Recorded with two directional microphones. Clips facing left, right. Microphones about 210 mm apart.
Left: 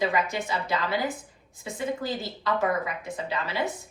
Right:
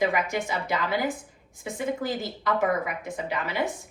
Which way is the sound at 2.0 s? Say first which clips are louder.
Right 2 dB; 20° right (ahead or behind).